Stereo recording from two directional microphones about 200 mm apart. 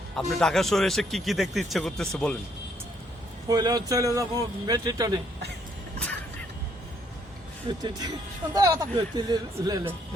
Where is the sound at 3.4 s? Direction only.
20° right (ahead or behind).